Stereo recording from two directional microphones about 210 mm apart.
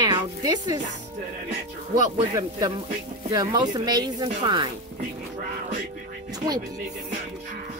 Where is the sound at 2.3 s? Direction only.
15° right (ahead or behind).